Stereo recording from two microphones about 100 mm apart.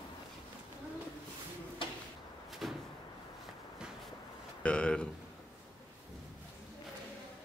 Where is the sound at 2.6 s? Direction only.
5° right (ahead or behind).